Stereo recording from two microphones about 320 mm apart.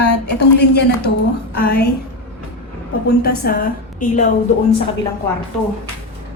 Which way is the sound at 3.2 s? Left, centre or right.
Left.